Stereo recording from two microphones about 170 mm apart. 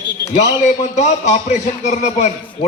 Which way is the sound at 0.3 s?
40° left (ahead or behind).